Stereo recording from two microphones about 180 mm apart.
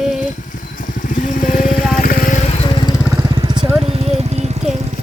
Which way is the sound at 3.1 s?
25° right (ahead or behind).